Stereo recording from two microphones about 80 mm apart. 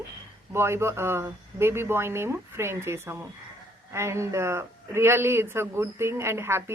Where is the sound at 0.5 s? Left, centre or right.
Right.